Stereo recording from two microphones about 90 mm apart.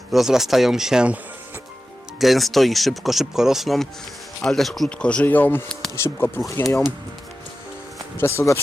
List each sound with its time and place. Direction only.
0.1 s speech: 5° right (ahead or behind)
2.1 s speech: centre (ahead or behind); by 6.4 s 20° left (ahead or behind)
6.5 s speech: 35° left (ahead or behind)
8.2 s speech: 25° left (ahead or behind)